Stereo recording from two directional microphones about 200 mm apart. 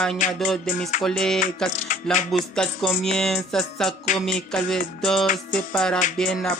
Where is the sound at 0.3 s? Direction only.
Centre (ahead or behind).